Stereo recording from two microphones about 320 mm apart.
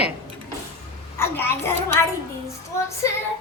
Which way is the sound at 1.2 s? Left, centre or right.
Centre.